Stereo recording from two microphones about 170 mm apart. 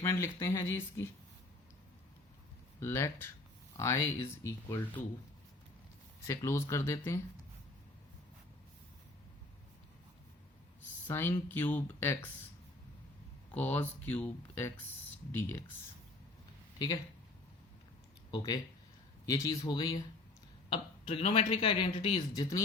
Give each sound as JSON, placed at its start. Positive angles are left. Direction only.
{"t": 0.0, "sound": "speech", "side_deg": 15}
{"t": 2.8, "sound": "speech", "side_deg": 15}
{"t": 6.2, "sound": "speech", "side_deg": 20}
{"t": 11.0, "sound": "speech", "side_deg": 10}
{"t": 13.5, "sound": "speech", "side_deg": 10}
{"t": 16.7, "sound": "speech", "side_deg": 20}
{"t": 18.3, "sound": "speech", "side_deg": 25}
{"t": 20.7, "sound": "speech", "side_deg": 35}